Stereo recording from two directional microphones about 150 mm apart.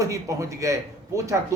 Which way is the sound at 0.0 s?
20° right (ahead or behind).